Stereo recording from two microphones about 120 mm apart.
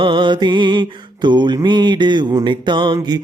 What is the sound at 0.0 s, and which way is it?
Mantra, 40° right (ahead or behind).